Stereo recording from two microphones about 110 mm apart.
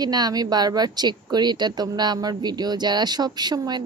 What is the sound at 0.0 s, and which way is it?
Speech, 35° right (ahead or behind).